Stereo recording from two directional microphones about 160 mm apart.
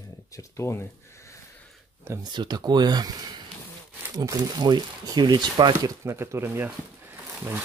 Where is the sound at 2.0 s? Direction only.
20° right (ahead or behind).